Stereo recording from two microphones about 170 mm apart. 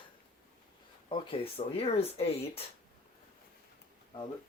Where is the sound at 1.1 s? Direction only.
30° left (ahead or behind).